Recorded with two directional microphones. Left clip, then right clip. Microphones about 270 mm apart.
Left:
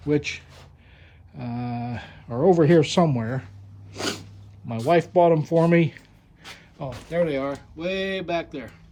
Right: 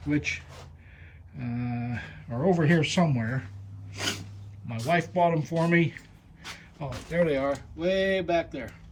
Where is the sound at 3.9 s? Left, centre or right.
Centre.